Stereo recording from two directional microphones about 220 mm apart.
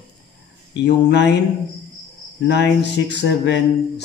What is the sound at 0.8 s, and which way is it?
Speech, 50° left (ahead or behind).